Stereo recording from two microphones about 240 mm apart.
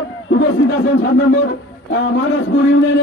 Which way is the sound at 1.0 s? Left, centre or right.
Left.